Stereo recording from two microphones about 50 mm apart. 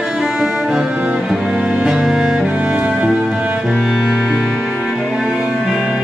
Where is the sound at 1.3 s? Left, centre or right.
Centre.